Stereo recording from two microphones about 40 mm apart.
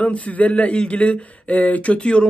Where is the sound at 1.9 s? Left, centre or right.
Left.